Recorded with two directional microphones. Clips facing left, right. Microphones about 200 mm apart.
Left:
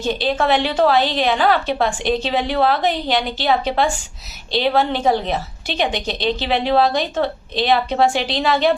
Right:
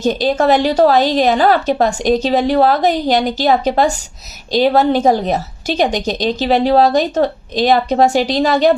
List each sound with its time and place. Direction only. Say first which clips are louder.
0.0 s a woman's voice: right 5 dB; 40° right (ahead or behind)